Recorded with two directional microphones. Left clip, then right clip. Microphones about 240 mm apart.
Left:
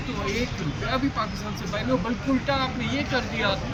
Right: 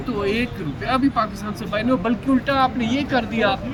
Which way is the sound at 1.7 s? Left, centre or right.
Centre.